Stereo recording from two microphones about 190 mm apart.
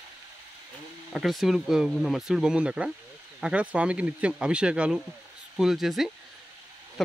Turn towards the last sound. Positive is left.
turn(degrees=0)  # may be behind; listen again after turning